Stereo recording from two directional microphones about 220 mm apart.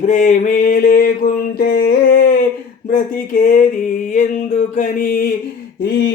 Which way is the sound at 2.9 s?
40° left (ahead or behind).